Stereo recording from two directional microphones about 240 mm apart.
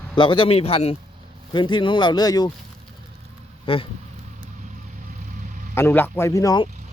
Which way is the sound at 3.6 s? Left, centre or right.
Left.